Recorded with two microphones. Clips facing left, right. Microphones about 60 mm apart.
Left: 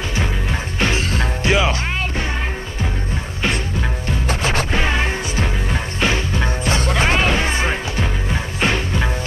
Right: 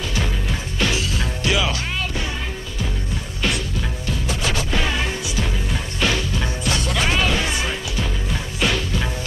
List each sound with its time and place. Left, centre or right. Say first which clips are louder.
0.1 s music: left 2 dB; left
4.3 s music: left 4 dB; left